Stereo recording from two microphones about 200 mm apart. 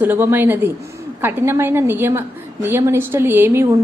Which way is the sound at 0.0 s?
10° right (ahead or behind).